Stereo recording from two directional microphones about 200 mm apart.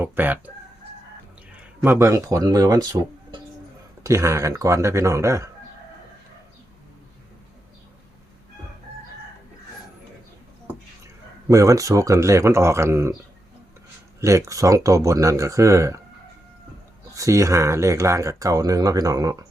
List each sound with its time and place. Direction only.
0.0 s speech: 10° right (ahead or behind)
1.8 s speech: 15° right (ahead or behind)
11.4 s speech: 15° right (ahead or behind)
14.2 s speech: 15° right (ahead or behind)
17.2 s speech: 15° right (ahead or behind)